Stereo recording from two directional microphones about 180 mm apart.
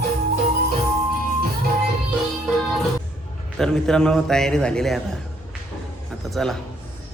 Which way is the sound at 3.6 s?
5° left (ahead or behind).